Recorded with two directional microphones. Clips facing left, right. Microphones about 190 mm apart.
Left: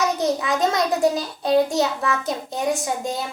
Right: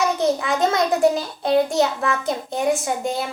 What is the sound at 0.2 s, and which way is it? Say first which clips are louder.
Speech: right 2 dB; 20° left (ahead or behind).